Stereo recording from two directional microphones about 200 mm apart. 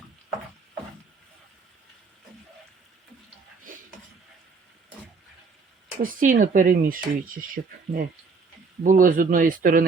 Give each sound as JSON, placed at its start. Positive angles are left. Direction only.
{"t": 6.0, "sound": "speech", "side_deg": -45}